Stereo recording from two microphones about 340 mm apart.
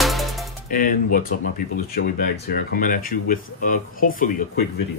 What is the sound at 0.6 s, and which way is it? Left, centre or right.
Speech, left.